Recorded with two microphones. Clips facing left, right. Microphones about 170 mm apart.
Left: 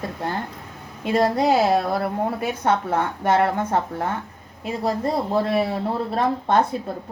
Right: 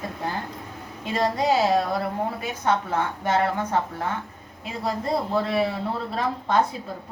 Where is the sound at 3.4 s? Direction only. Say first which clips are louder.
Left 3 dB; 40° left (ahead or behind).